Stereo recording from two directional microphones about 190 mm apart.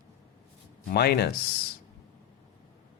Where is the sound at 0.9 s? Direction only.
55° left (ahead or behind).